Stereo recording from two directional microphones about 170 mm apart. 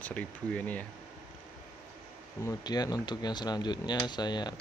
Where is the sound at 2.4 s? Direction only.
20° left (ahead or behind).